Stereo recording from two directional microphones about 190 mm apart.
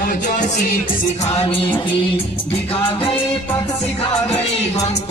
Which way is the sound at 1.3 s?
30° left (ahead or behind).